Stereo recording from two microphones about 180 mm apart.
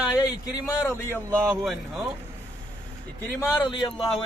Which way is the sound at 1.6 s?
Centre (ahead or behind).